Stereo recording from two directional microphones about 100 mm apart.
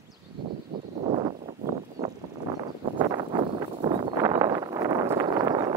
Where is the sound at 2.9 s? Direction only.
50° right (ahead or behind).